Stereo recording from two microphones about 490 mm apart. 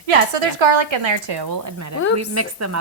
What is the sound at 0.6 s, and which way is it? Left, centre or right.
A woman's voice, right.